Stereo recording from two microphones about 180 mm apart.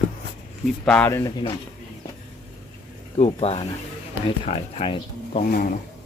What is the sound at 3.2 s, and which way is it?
Speech, 35° left (ahead or behind).